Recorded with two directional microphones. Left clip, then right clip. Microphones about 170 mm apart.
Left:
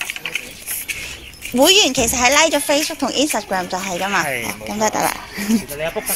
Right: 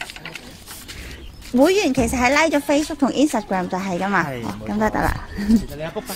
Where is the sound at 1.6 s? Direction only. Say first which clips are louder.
Left 4 dB; 25° right (ahead or behind).